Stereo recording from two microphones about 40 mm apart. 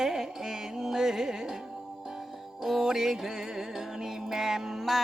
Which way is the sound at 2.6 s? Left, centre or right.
Centre.